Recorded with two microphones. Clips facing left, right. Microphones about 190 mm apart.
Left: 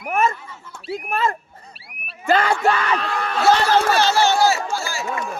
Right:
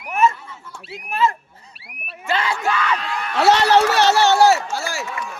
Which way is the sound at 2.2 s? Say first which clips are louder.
Left 5 dB; 50° left (ahead or behind).